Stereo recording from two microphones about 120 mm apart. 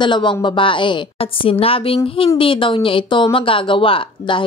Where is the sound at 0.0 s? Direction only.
40° left (ahead or behind).